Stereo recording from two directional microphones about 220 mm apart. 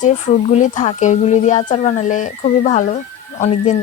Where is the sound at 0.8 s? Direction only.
35° left (ahead or behind).